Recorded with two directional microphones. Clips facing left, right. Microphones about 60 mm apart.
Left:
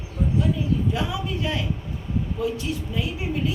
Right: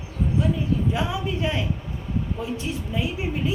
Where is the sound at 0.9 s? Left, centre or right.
Right.